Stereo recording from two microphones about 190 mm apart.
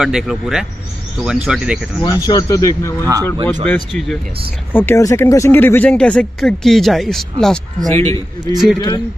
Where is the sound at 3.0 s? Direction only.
15° right (ahead or behind).